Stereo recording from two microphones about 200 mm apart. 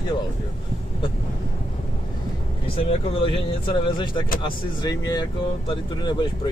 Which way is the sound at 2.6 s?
30° left (ahead or behind).